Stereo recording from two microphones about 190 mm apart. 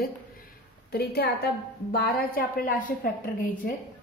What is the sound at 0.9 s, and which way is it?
A woman's voice, 55° left (ahead or behind).